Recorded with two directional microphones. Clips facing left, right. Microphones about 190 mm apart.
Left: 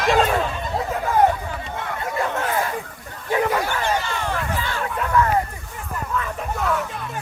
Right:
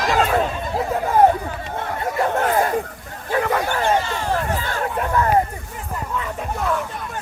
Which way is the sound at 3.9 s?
30° right (ahead or behind).